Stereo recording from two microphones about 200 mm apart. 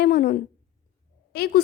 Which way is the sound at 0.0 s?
45° left (ahead or behind).